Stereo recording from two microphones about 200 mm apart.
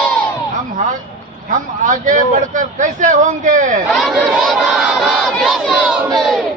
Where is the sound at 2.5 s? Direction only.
40° right (ahead or behind).